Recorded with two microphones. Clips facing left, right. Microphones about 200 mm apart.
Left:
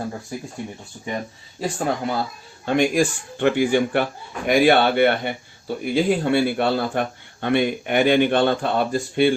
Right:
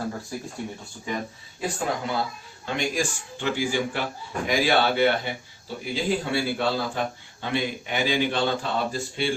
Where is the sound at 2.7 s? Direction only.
55° left (ahead or behind).